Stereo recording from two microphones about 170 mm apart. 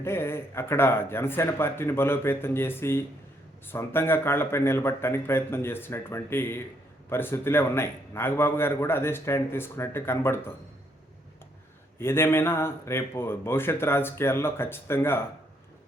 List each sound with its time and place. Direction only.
0.0 s a man's voice: 15° left (ahead or behind)
11.9 s a man's voice: 15° left (ahead or behind)